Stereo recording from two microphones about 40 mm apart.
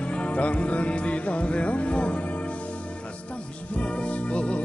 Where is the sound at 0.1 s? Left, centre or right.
Left.